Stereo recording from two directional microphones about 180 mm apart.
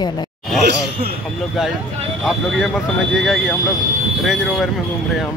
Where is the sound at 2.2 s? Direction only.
Centre (ahead or behind).